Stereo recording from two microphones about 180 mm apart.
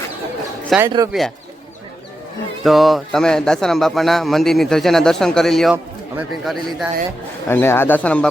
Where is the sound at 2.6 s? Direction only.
Centre (ahead or behind).